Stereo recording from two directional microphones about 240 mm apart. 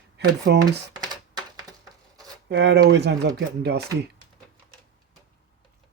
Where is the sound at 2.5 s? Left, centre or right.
Right.